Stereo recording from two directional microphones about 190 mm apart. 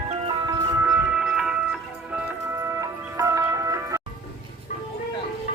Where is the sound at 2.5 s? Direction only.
15° right (ahead or behind).